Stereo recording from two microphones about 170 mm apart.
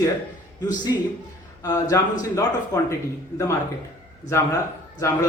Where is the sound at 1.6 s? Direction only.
20° left (ahead or behind).